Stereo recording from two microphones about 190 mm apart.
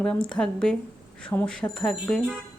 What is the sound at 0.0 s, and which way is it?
Speech, 5° left (ahead or behind).